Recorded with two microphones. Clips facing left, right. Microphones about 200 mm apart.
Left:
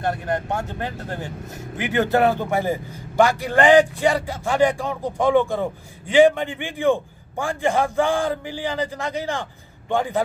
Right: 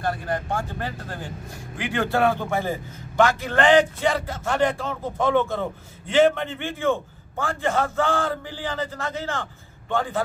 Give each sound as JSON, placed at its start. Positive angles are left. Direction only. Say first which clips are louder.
{"t": 0.0, "sound": "a man's voice", "louder": "left 2 dB", "side_deg": 20}